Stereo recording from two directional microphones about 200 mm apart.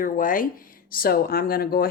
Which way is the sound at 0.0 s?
45° left (ahead or behind).